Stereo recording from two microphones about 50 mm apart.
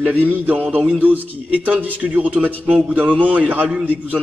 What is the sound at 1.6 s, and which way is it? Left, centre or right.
A man's voice, right.